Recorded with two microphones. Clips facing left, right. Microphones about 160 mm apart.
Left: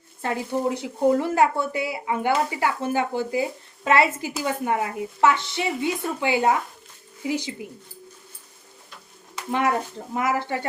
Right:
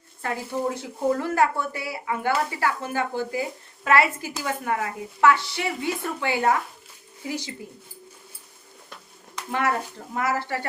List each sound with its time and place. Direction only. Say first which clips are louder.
0.2 s a woman's voice: left 3 dB; 25° left (ahead or behind)
9.5 s a woman's voice: left 2 dB; 20° left (ahead or behind)